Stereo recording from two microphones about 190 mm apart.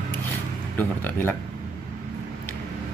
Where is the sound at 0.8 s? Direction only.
10° left (ahead or behind).